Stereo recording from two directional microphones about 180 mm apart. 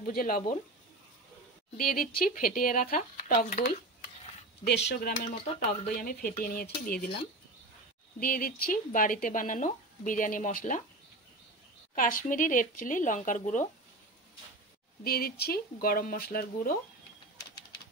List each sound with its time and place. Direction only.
0.0 s speech: 55° left (ahead or behind)
1.8 s speech: 55° left (ahead or behind)
4.6 s speech: 70° left (ahead or behind)
5.9 s speech: 55° left (ahead or behind)
8.2 s speech: 50° left (ahead or behind)
11.9 s speech: 50° left (ahead or behind)
15.0 s speech: 60° left (ahead or behind)